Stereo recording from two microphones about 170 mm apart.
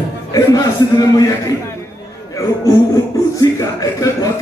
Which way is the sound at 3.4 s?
20° left (ahead or behind).